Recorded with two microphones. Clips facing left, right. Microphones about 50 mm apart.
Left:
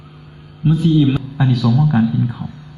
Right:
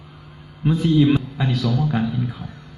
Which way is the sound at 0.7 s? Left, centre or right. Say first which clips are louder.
Left 3 dB; right.